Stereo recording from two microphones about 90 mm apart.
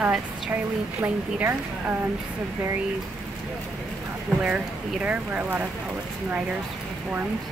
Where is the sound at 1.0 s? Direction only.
25° right (ahead or behind).